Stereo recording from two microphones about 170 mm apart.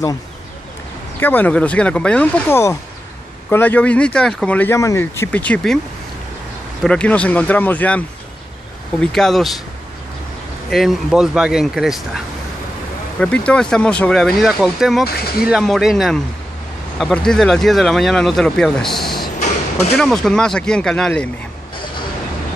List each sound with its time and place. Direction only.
1.2 s speech: 10° left (ahead or behind)
6.8 s speech: 5° left (ahead or behind)
9.0 s speech: centre (ahead or behind)
10.7 s speech: centre (ahead or behind)
13.5 s speech: 5° left (ahead or behind)
15.0 s speech: 65° left (ahead or behind)
15.4 s speech: centre (ahead or behind)
19.4 s a sound: 40° left (ahead or behind)
20.0 s speech: 5° left (ahead or behind)